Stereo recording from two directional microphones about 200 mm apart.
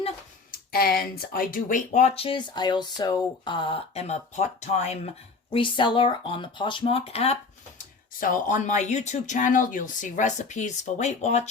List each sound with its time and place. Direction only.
0.7 s speech: 50° left (ahead or behind); by 7.3 s 30° left (ahead or behind)
8.2 s speech: 40° left (ahead or behind)